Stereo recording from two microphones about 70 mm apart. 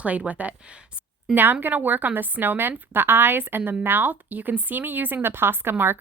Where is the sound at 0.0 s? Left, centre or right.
Right.